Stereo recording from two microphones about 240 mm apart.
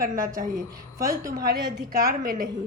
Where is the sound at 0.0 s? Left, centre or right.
Right.